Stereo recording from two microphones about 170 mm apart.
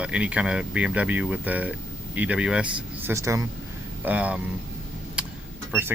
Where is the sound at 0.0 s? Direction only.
5° right (ahead or behind).